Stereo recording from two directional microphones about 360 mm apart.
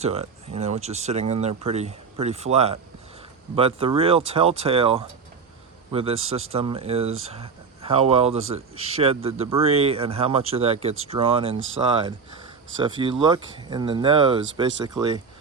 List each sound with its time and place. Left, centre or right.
0.0 s speech: centre